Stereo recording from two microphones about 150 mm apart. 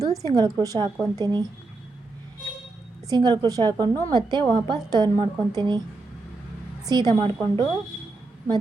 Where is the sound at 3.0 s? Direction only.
25° right (ahead or behind).